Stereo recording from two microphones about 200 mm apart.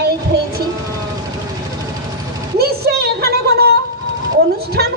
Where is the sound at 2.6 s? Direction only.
50° right (ahead or behind).